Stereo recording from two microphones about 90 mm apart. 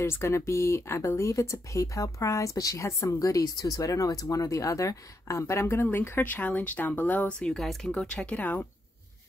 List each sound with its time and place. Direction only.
0.0 s speech: 30° left (ahead or behind)